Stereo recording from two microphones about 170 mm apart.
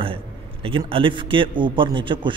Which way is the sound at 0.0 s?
30° right (ahead or behind).